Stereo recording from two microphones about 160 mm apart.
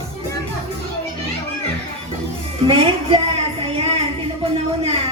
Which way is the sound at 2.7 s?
35° right (ahead or behind).